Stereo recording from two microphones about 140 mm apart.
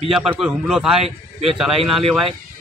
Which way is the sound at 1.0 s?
45° right (ahead or behind).